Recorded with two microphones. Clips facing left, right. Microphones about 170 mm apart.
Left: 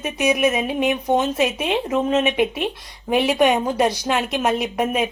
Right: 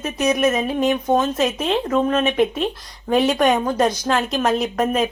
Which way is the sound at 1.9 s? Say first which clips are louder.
Even; 20° left (ahead or behind).